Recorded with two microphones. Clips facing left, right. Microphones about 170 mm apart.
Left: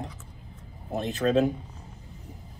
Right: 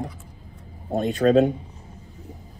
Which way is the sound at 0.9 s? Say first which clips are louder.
Right 6 dB; 35° right (ahead or behind).